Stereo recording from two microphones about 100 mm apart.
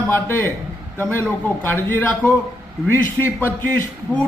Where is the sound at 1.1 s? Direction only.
20° left (ahead or behind).